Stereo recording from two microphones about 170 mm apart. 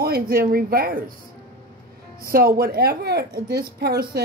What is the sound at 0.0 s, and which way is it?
Speech, 60° right (ahead or behind).